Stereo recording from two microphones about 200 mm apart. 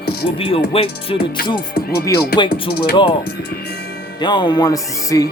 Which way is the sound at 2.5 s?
50° left (ahead or behind).